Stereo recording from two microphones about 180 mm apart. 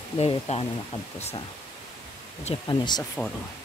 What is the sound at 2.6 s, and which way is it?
Speech, 25° left (ahead or behind).